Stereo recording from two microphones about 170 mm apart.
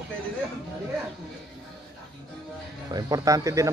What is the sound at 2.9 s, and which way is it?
Speech, 20° right (ahead or behind).